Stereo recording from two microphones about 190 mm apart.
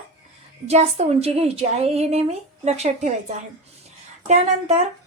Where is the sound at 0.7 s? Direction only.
35° right (ahead or behind).